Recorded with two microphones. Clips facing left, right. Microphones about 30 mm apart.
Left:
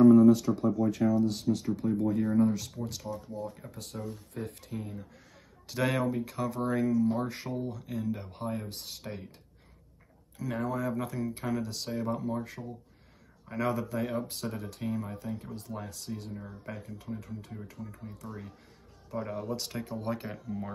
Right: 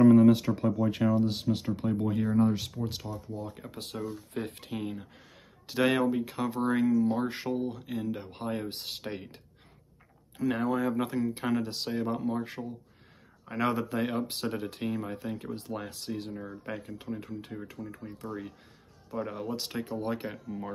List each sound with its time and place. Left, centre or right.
0.1 s speech: right
3.7 s speech: right
5.7 s speech: right
13.6 s speech: right
19.0 s speech: centre
19.3 s speech: right